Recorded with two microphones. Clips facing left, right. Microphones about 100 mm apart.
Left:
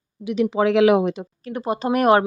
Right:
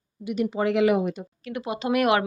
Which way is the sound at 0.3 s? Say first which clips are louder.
Left 5 dB; 90° left.